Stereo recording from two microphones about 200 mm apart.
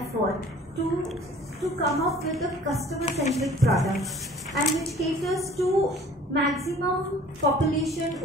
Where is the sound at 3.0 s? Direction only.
35° left (ahead or behind).